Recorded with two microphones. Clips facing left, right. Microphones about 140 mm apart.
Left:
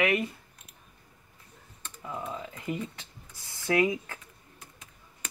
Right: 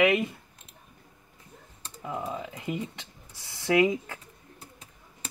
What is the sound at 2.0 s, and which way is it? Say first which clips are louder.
Speech: right 3 dB; 15° right (ahead or behind).